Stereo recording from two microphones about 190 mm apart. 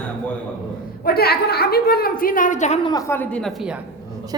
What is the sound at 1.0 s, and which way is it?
A woman's voice, 55° left (ahead or behind).